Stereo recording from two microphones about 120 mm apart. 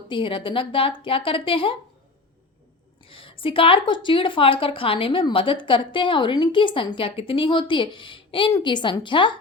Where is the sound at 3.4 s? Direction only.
45° left (ahead or behind).